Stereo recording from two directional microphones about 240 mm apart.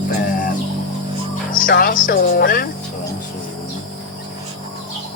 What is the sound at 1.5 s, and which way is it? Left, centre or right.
Speech, left.